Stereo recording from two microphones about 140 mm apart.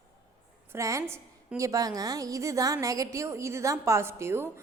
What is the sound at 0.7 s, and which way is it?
A woman's voice, 20° right (ahead or behind).